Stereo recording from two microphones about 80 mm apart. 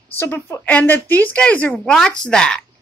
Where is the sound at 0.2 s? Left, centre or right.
Left.